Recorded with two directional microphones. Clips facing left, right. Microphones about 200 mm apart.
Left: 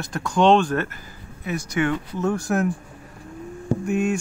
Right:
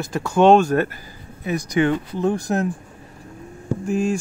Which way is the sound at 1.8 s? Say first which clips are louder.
Right 3 dB; 30° right (ahead or behind).